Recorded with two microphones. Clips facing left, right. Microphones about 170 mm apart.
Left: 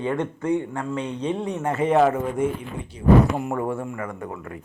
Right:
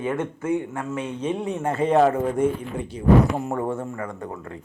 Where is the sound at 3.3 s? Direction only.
35° right (ahead or behind).